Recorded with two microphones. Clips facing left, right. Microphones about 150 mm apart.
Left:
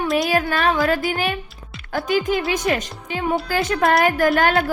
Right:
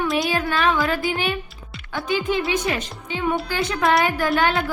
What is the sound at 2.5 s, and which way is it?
Speech, 45° left (ahead or behind).